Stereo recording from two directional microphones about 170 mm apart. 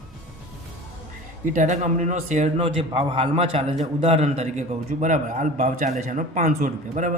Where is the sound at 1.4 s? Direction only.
50° right (ahead or behind).